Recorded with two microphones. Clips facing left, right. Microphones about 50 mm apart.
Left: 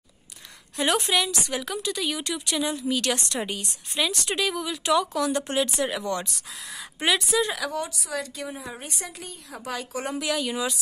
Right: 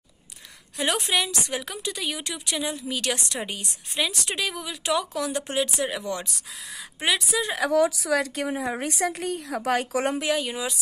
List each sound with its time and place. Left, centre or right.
0.7 s a woman's voice: centre
7.7 s a woman's voice: right
8.7 s a woman's voice: right
10.2 s speech: centre